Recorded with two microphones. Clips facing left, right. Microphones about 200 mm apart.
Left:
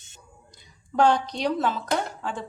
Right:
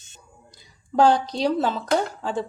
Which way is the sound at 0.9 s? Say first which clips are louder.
Right 3 dB; 35° right (ahead or behind).